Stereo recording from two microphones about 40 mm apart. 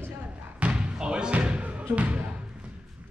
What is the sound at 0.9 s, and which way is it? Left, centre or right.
Music, right.